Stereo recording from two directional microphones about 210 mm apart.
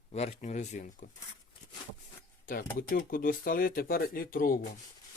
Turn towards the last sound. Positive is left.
turn(degrees=40)  # may be behind; listen again after turning